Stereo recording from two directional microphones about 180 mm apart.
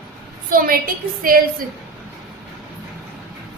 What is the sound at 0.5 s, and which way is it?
A woman's voice, 55° right (ahead or behind).